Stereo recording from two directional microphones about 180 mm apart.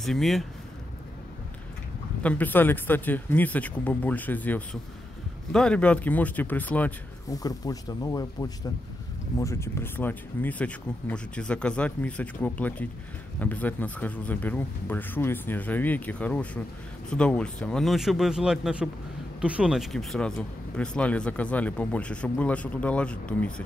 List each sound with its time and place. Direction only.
0.0 s speech: centre (ahead or behind)
2.2 s a man's voice: 10° left (ahead or behind)
7.3 s a man's voice: 20° left (ahead or behind)